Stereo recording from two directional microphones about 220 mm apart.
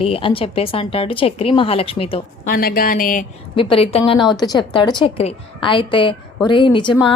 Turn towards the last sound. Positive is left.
turn(degrees=20)  # may be behind; listen again after turning